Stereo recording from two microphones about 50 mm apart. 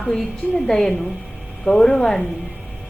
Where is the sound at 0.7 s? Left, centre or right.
Centre.